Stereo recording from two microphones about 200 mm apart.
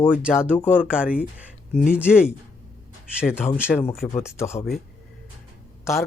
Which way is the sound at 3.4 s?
10° left (ahead or behind).